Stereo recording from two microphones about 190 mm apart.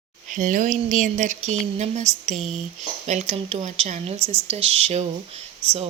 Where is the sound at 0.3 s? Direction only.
45° right (ahead or behind).